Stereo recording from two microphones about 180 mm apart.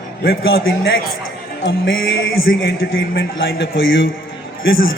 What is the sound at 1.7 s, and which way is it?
Speech, 90° left.